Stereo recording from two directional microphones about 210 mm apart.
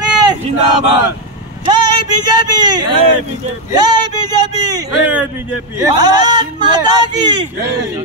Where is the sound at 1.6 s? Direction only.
20° right (ahead or behind).